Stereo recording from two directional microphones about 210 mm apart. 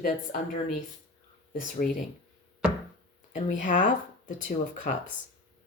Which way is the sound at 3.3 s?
35° left (ahead or behind).